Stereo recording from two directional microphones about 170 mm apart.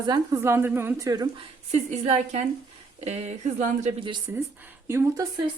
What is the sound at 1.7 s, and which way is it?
Speech, 40° right (ahead or behind).